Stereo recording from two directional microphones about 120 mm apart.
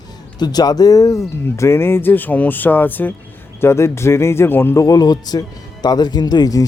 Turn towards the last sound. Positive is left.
turn(degrees=30)  # may be behind; listen again after turning